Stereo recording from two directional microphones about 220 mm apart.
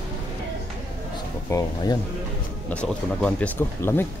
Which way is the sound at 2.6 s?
5° left (ahead or behind).